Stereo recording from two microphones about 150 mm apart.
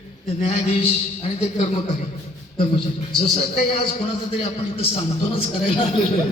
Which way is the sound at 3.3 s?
40° left (ahead or behind).